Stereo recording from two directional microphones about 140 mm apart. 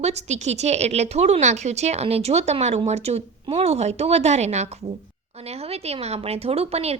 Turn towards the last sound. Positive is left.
turn(degrees=-45)  # may be behind; listen again after turning